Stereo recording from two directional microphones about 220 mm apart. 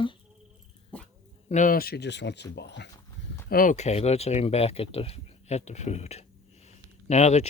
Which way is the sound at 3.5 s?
35° left (ahead or behind).